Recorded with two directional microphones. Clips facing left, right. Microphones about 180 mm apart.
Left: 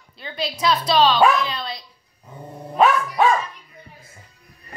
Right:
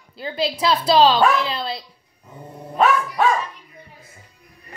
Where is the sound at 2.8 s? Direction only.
Centre (ahead or behind).